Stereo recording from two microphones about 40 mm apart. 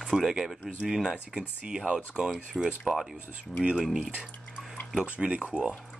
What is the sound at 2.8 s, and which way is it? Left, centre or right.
Speech, centre.